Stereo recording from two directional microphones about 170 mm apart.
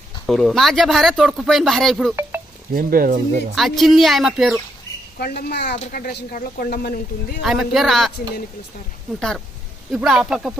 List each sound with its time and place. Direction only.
0.3 s speech: centre (ahead or behind)
2.7 s speech: 60° right (ahead or behind)
3.5 s speech: centre (ahead or behind)
5.1 s a woman's voice: 65° left (ahead or behind)
5.7 s speech: 50° left (ahead or behind)
7.4 s speech: centre (ahead or behind)
9.9 s speech: centre (ahead or behind)